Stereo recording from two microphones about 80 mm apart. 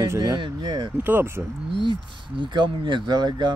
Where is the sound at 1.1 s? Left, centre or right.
Right.